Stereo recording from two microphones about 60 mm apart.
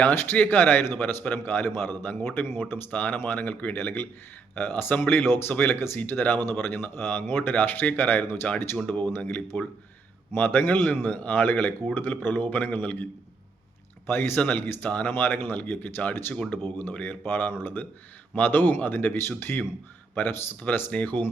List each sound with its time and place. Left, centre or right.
0.0 s speech: left
14.1 s speech: left
14.8 s speech: left